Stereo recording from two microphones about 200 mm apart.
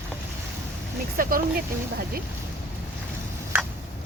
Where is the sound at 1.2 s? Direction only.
45° right (ahead or behind).